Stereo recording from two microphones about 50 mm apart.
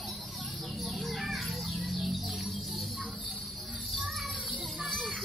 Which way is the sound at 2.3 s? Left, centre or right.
Centre.